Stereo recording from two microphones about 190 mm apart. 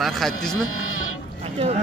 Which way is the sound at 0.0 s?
Centre (ahead or behind).